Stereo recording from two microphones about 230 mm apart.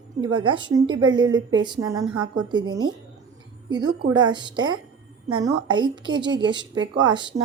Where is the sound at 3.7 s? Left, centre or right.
Centre.